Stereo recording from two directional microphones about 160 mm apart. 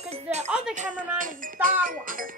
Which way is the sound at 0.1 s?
45° right (ahead or behind).